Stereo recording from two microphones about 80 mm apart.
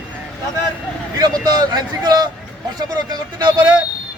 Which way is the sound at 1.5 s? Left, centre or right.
Right.